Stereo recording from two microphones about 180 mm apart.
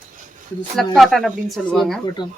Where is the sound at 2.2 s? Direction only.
25° left (ahead or behind).